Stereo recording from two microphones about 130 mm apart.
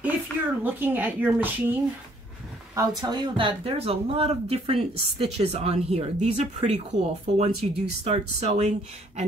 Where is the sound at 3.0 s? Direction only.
35° right (ahead or behind).